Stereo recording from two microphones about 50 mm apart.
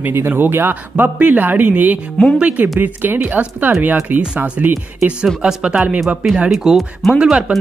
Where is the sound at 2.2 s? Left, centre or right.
Centre.